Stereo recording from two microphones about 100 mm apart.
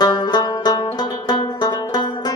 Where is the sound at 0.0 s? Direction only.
45° left (ahead or behind).